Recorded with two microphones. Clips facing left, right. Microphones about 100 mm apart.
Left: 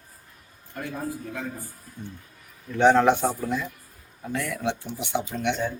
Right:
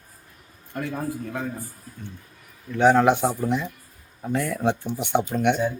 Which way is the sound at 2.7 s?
5° right (ahead or behind).